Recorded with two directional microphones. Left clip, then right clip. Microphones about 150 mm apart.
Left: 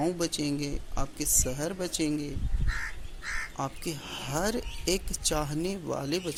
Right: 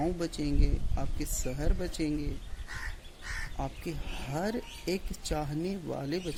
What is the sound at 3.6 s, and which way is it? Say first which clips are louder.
Speech: left 4 dB; 15° right (ahead or behind).